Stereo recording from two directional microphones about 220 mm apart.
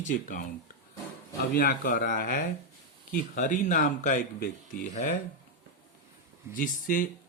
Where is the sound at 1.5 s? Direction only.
40° left (ahead or behind).